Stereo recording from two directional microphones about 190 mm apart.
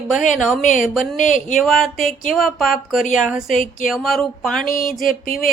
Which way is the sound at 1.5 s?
Centre (ahead or behind).